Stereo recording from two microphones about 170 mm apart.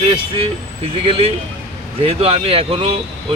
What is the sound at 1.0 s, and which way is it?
Speech, 30° right (ahead or behind).